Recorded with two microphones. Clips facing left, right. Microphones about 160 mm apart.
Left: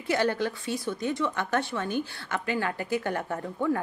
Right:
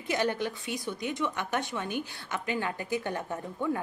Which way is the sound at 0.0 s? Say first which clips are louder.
Left 3 dB; 20° right (ahead or behind).